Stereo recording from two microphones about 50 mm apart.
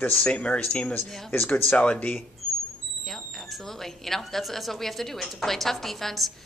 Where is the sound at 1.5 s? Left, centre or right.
Left.